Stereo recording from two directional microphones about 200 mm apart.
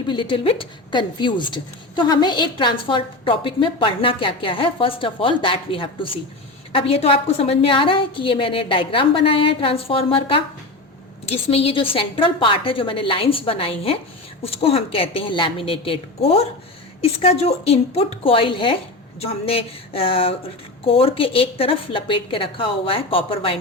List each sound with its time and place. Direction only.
0.1 s a woman's voice: 25° left (ahead or behind)